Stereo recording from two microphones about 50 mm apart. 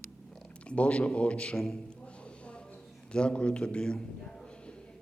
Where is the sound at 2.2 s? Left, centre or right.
Left.